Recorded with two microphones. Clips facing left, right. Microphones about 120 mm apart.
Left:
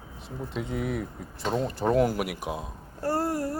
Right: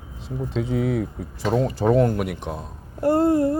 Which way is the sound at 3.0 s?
20° right (ahead or behind).